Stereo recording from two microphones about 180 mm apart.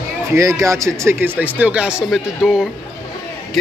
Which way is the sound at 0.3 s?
15° right (ahead or behind).